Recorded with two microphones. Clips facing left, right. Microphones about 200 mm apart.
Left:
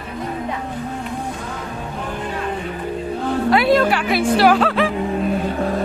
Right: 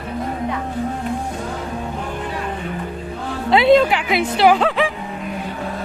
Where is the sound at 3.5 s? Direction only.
25° right (ahead or behind).